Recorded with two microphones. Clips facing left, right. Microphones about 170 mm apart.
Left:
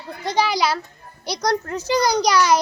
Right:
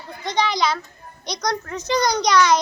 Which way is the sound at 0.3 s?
10° left (ahead or behind).